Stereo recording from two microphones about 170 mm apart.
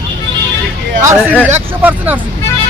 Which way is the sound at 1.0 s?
15° right (ahead or behind).